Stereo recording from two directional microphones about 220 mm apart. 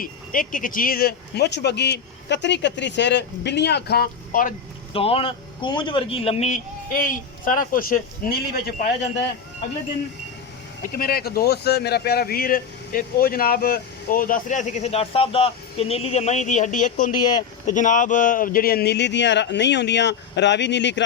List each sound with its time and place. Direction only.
0.0 s speech: 40° left (ahead or behind)
4.9 s speech: 25° left (ahead or behind); by 9.2 s 45° left (ahead or behind)
10.9 s speech: 45° left (ahead or behind)